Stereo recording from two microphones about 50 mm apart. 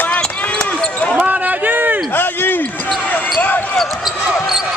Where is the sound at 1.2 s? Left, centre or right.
Right.